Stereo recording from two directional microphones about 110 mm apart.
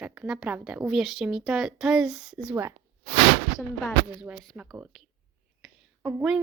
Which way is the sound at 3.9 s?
Centre (ahead or behind).